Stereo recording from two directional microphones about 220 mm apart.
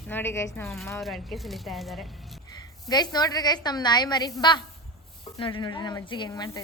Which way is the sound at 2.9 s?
20° left (ahead or behind).